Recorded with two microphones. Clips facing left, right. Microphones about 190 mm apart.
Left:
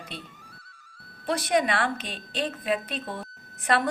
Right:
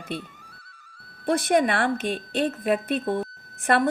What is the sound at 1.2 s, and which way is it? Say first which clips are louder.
A woman's voice: right 4 dB; 55° right (ahead or behind).